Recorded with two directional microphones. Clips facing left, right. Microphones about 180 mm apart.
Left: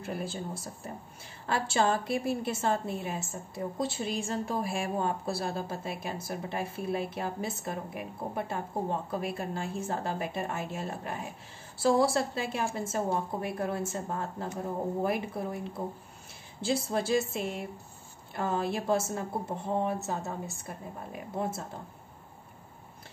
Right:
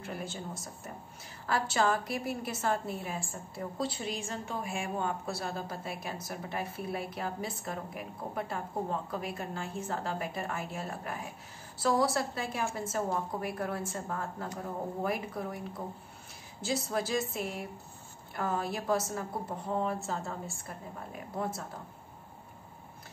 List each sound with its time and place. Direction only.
0.0 s a woman's voice: 30° left (ahead or behind)